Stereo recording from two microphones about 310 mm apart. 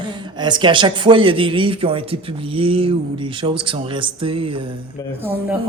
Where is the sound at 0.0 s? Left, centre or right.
Centre.